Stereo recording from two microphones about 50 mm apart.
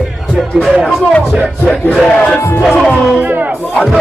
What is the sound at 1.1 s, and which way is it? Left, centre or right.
Speech, left.